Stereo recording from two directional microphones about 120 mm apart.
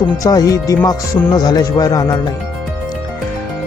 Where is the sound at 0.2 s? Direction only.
30° left (ahead or behind).